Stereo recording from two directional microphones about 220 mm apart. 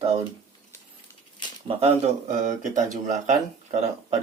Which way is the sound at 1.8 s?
30° right (ahead or behind).